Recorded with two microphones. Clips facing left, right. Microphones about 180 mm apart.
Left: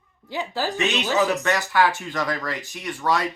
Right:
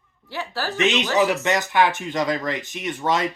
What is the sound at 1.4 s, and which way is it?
Speech, 20° right (ahead or behind).